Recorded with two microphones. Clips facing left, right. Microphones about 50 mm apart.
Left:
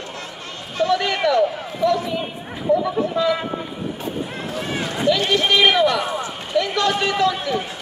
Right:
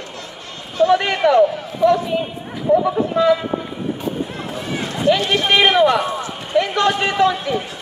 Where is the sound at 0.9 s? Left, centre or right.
Right.